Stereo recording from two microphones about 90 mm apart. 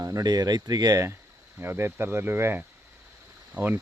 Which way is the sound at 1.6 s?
25° right (ahead or behind).